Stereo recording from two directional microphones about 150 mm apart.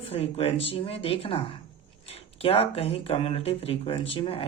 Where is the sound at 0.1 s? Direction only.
40° left (ahead or behind).